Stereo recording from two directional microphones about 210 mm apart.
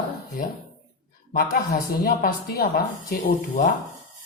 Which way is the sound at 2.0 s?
45° left (ahead or behind).